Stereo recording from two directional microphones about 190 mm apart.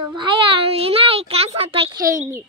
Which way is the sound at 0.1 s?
25° right (ahead or behind).